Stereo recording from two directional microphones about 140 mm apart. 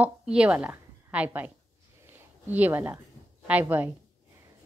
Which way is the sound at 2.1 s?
15° right (ahead or behind).